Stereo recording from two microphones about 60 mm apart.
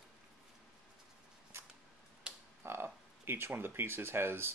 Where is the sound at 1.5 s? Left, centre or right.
Right.